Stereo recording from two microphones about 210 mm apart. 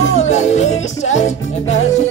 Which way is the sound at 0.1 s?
35° left (ahead or behind).